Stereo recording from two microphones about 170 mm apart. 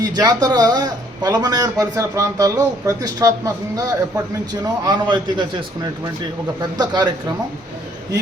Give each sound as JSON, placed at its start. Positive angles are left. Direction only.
{"t": 0.0, "sound": "a man's voice", "side_deg": -20}